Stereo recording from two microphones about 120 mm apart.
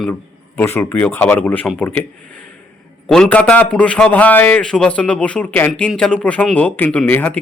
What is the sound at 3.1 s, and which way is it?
A man's voice, 10° left (ahead or behind).